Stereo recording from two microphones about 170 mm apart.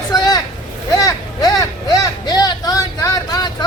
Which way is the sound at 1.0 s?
20° left (ahead or behind).